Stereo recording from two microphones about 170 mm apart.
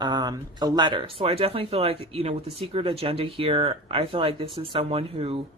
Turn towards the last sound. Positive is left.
turn(degrees=-35)  # may be behind; listen again after turning